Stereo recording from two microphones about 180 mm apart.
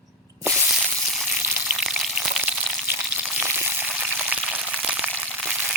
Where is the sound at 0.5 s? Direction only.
Centre (ahead or behind).